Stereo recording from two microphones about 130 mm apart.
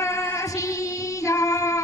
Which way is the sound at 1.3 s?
25° left (ahead or behind).